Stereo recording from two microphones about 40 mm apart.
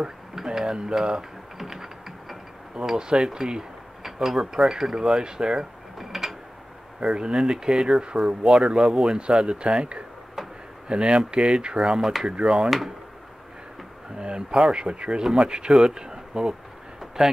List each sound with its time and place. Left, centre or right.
0.0 s a sound: centre
0.6 s speech: centre
1.6 s typing: centre
2.8 s speech: centre
3.2 s speech: centre
5.2 s speech: centre
5.9 s mechanisms: centre
7.0 s speech: right
7.4 s speech: centre
9.3 s speech: right
11.8 s speech: centre
14.1 s a sound: right
14.7 s speech: right
17.2 s speech: centre